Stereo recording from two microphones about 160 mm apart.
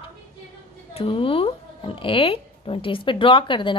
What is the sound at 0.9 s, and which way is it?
Speech, 35° left (ahead or behind).